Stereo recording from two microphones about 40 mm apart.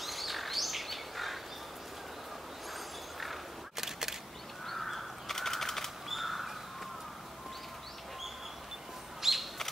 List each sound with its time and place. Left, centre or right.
0.0 s bird: centre
3.7 s single-lens reflex camera: centre
4.6 s crow: centre
6.0 s whip: centre
9.2 s bird: centre